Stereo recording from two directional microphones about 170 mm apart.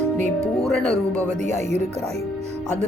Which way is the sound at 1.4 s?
45° right (ahead or behind).